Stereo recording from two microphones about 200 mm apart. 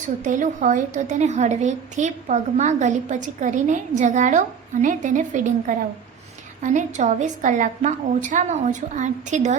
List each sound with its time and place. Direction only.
0.3 s a woman's voice: 40° right (ahead or behind)